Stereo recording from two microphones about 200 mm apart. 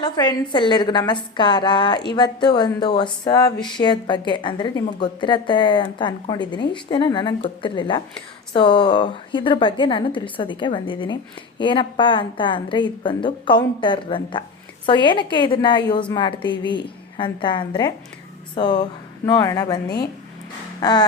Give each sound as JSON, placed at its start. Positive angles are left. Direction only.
{"t": 0.0, "sound": "a woman's voice", "side_deg": 20}